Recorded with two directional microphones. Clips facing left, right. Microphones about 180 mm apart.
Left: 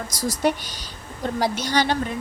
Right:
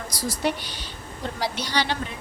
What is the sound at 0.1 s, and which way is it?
A woman's voice, 45° left (ahead or behind).